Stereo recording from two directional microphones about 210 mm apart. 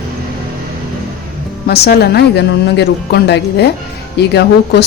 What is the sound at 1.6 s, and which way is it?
Speech, 50° left (ahead or behind).